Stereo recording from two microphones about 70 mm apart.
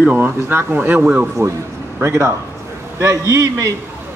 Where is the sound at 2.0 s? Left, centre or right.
Right.